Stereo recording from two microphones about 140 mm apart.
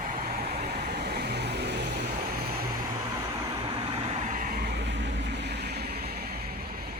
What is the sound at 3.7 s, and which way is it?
Vehicle, 40° right (ahead or behind).